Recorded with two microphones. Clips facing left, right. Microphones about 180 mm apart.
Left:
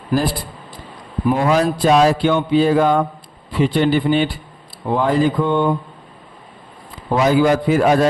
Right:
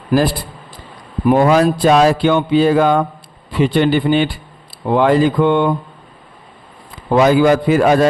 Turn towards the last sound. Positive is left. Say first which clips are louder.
# right 3 dB
turn(degrees=-80)